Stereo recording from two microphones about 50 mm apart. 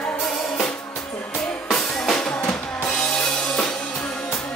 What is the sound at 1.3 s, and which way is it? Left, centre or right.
Drum kit, centre.